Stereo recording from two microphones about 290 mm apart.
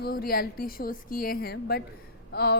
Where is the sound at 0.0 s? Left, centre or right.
Left.